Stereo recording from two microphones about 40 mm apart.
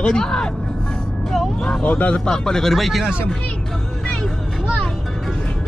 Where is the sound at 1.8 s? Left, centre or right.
Left.